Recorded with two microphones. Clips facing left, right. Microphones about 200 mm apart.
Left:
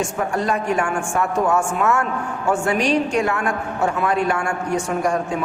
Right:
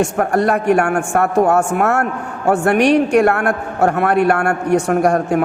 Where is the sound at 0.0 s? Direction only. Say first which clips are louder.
Right 7 dB; 60° right (ahead or behind).